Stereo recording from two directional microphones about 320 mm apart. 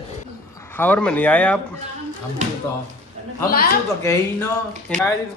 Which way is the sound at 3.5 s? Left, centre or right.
Left.